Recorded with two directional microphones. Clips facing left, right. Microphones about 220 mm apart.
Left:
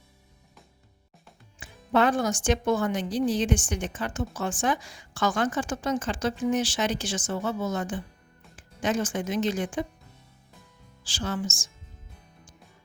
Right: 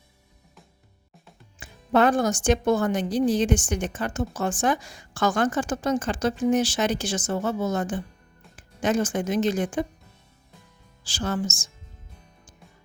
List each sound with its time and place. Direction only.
1.5 s speech: 45° right (ahead or behind)
11.1 s speech: 45° right (ahead or behind)